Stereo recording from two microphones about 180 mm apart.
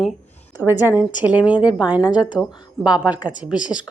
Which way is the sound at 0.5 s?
10° right (ahead or behind).